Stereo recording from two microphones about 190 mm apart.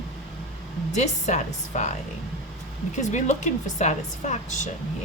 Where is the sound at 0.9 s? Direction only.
40° left (ahead or behind).